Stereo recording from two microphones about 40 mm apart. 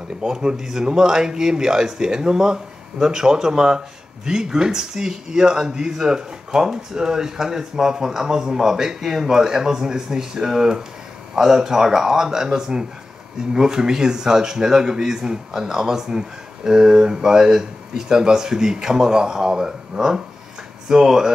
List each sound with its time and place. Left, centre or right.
0.2 s a man's voice: right